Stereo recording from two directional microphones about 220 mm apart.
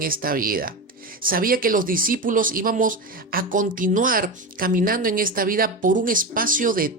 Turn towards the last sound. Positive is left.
turn(degrees=-40)  # may be behind; listen again after turning